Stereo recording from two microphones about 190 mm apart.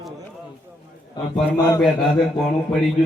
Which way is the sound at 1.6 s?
20° left (ahead or behind).